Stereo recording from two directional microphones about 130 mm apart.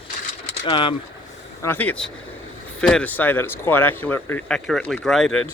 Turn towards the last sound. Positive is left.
turn(degrees=5)  # may be behind; listen again after turning